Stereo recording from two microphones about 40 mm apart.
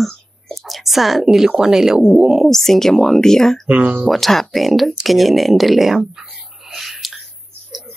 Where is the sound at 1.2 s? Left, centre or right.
Centre.